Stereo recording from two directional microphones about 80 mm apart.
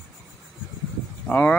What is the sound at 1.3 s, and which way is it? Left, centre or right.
Speech, left.